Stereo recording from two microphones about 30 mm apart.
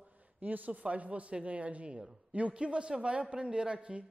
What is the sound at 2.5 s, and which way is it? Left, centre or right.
A man's voice, right.